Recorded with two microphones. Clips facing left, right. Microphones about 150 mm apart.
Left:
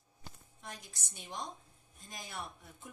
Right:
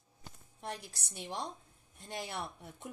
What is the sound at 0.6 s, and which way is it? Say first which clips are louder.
A woman's voice: right 8 dB; 65° right (ahead or behind).